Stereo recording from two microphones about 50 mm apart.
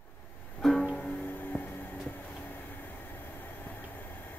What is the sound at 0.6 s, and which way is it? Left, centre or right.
Music, centre.